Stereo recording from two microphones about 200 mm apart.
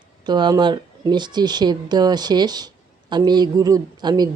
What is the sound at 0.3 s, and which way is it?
Speech, 20° right (ahead or behind).